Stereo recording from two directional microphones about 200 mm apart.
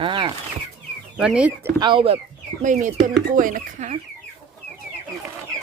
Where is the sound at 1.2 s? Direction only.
5° right (ahead or behind).